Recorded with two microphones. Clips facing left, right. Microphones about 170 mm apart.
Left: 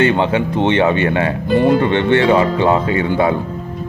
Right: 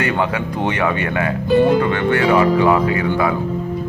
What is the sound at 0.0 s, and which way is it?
Speech, 25° left (ahead or behind).